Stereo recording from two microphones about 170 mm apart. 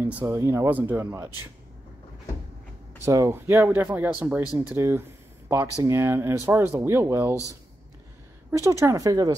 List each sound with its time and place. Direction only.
0.0 s speech: 15° right (ahead or behind)
3.1 s speech: 15° right (ahead or behind)
8.5 s speech: 15° right (ahead or behind)